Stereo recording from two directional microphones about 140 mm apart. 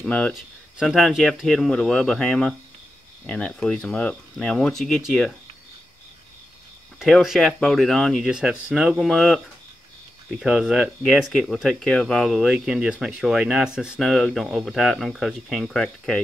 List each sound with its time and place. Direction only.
0.0 s speech: 5° left (ahead or behind)
7.0 s speech: centre (ahead or behind)